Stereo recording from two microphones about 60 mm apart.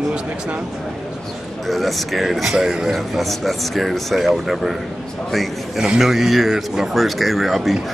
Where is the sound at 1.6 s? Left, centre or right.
Centre.